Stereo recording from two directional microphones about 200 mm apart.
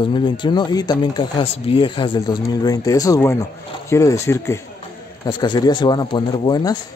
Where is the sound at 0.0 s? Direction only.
25° left (ahead or behind).